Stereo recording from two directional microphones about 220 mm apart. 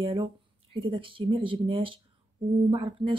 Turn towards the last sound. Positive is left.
turn(degrees=-20)  # may be behind; listen again after turning